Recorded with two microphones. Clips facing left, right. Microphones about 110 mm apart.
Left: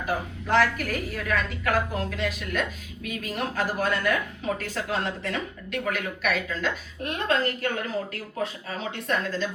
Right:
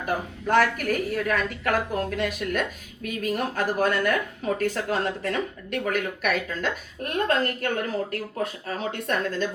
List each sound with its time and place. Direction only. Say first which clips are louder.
0.0 s speech: right 2 dB; 50° right (ahead or behind)